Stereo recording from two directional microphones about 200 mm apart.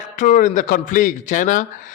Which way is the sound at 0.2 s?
40° left (ahead or behind).